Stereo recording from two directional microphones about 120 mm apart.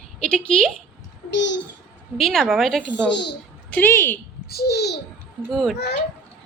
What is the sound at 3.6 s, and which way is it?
Speech, 15° left (ahead or behind).